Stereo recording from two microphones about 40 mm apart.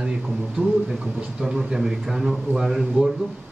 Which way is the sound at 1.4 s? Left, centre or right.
Centre.